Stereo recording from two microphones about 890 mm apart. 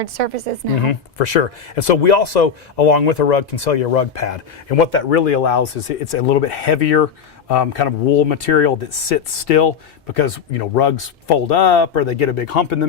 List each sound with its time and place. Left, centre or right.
0.0 s speech: right
0.8 s speech: left